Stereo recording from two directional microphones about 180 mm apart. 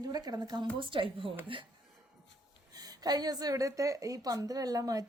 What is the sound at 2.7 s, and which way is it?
Speech, 20° right (ahead or behind).